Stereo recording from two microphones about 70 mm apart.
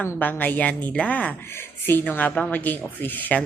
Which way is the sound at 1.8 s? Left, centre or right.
Left.